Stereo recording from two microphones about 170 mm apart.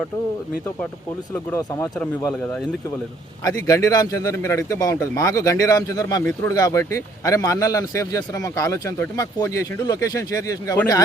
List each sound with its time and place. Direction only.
1.3 s speech: 10° left (ahead or behind)
3.4 s a man's voice: 20° left (ahead or behind)